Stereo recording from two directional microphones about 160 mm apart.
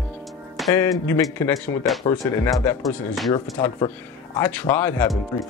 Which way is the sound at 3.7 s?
10° left (ahead or behind).